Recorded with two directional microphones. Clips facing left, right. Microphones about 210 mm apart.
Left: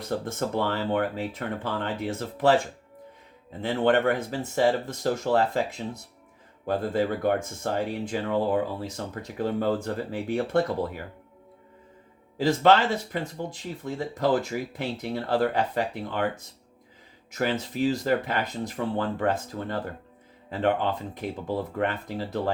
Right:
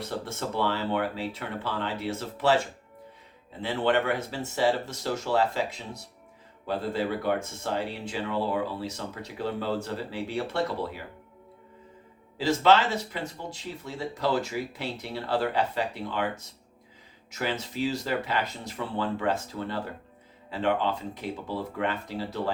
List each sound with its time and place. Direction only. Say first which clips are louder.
0.3 s speech: even; 50° left (ahead or behind)
3.6 s speech: left 3 dB; 50° left (ahead or behind)
12.4 s speech: left 2 dB; 50° left (ahead or behind)
14.8 s speech: left 4 dB; 50° left (ahead or behind)
17.3 s speech: left 4 dB; 50° left (ahead or behind)